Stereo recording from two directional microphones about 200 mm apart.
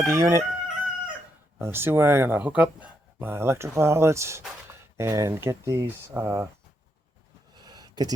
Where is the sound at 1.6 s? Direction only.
10° right (ahead or behind).